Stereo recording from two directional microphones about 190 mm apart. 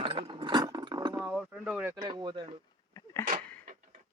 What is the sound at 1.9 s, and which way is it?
Speech, 25° right (ahead or behind).